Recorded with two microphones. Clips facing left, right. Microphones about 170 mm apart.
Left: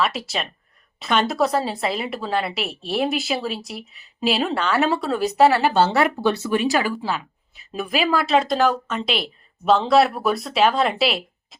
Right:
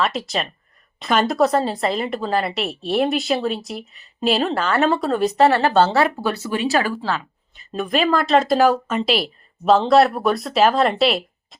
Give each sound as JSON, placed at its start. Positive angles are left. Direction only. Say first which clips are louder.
{"t": 0.0, "sound": "a woman's voice", "louder": "right 2 dB", "side_deg": 0}
{"t": 6.1, "sound": "speech", "louder": "left 3 dB", "side_deg": -10}
{"t": 7.0, "sound": "a woman's voice", "louder": "right 2 dB", "side_deg": 10}